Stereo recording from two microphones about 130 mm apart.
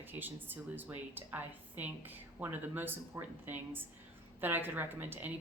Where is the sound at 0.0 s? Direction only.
15° right (ahead or behind).